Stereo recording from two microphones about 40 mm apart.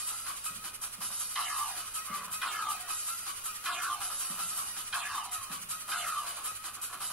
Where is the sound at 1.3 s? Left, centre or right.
Centre.